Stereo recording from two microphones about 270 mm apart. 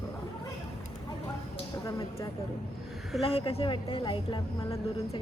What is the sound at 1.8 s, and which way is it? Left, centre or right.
A woman's voice, centre.